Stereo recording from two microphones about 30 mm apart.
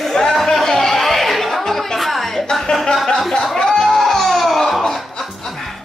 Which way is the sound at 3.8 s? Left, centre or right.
Centre.